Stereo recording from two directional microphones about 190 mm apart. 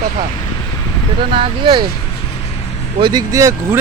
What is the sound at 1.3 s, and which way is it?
Speech, 25° right (ahead or behind).